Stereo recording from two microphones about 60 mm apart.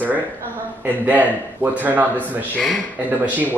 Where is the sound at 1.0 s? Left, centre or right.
Right.